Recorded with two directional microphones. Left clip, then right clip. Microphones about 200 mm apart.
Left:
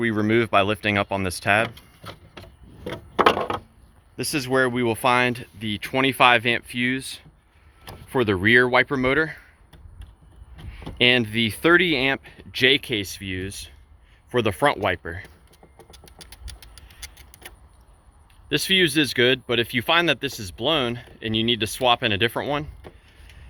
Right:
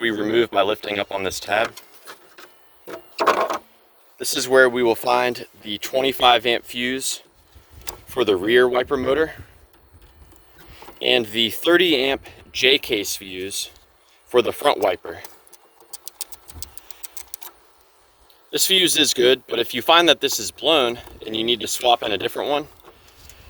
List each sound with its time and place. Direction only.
0.0 s speech: 25° right (ahead or behind)
4.2 s speech: 30° right (ahead or behind)
10.7 s speech: 25° right (ahead or behind)
18.5 s speech: 30° right (ahead or behind)